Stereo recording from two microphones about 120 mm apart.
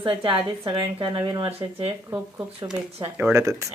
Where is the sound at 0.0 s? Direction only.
45° right (ahead or behind).